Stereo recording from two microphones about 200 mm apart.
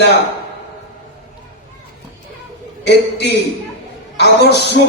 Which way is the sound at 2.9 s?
55° left (ahead or behind).